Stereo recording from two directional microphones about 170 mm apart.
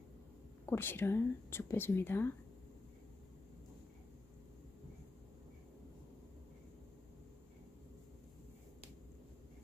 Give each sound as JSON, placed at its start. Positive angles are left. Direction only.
{"t": 0.7, "sound": "speech", "side_deg": 15}